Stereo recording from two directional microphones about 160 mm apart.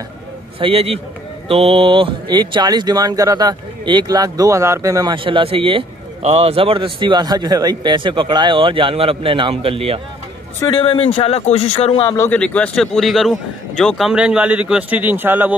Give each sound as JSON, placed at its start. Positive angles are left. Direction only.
{"t": 0.6, "sound": "speech", "side_deg": -35}
{"t": 10.8, "sound": "a man's voice", "side_deg": 35}
{"t": 12.2, "sound": "a man's voice", "side_deg": 10}